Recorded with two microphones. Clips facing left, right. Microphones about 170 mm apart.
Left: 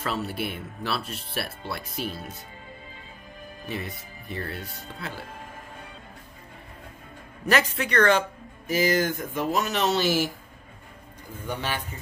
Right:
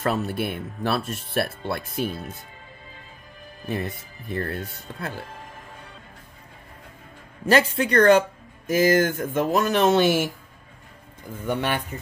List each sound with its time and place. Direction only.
0.0 s speech: 50° right (ahead or behind)
3.6 s speech: 50° right (ahead or behind)
7.4 s a man's voice: 35° right (ahead or behind)
8.6 s speech: 55° right (ahead or behind)
11.4 s speech: 50° right (ahead or behind)